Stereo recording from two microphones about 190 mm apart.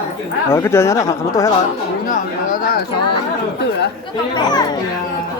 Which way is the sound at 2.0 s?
45° left (ahead or behind).